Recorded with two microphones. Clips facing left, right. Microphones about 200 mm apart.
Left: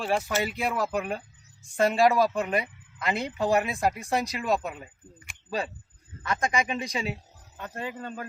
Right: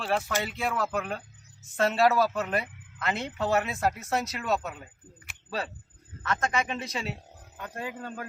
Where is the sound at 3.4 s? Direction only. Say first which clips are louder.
Left 2 dB; 15° left (ahead or behind).